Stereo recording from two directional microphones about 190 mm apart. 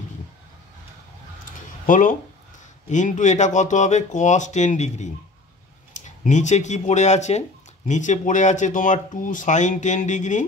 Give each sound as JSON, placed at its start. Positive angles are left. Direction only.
{"t": 1.9, "sound": "speech", "side_deg": 45}